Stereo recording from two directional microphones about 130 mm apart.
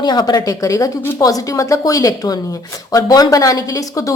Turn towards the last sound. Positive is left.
turn(degrees=25)  # may be behind; listen again after turning